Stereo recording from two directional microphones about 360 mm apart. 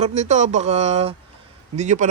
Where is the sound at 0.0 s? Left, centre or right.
Centre.